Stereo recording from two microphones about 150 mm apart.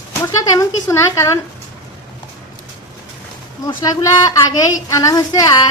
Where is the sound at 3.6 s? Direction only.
25° left (ahead or behind).